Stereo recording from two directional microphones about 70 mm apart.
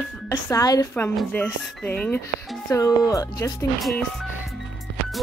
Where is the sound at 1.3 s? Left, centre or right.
Centre.